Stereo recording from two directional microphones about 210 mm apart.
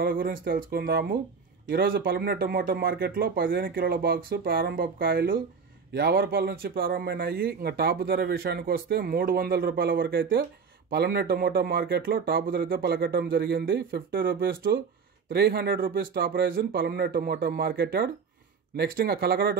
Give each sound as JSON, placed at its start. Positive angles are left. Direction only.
{"t": 0.0, "sound": "speech", "side_deg": -45}